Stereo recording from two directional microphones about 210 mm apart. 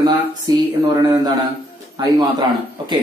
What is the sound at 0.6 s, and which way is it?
Speech, 20° right (ahead or behind).